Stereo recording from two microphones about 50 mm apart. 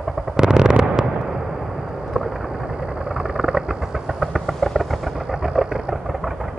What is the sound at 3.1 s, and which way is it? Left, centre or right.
Vehicle, centre.